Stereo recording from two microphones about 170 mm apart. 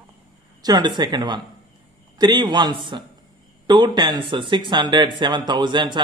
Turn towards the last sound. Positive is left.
turn(degrees=-25)  # may be behind; listen again after turning